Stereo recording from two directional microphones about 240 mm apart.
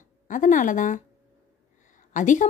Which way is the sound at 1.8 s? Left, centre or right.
Left.